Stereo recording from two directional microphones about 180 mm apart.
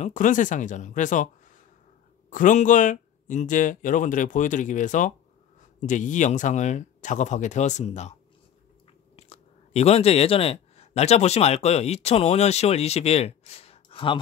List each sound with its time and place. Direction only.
0.0 s speech: 45° left (ahead or behind); by 14.2 s 30° left (ahead or behind)